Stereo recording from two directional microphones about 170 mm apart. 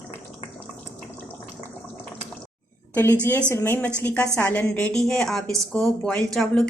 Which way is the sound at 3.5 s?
15° left (ahead or behind).